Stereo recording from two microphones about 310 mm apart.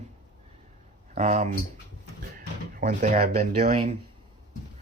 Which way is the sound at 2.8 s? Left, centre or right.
Right.